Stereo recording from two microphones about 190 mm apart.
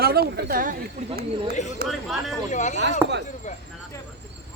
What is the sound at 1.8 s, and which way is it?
Speech, 55° right (ahead or behind).